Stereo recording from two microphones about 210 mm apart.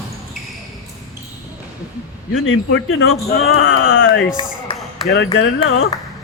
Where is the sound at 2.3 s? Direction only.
70° left (ahead or behind).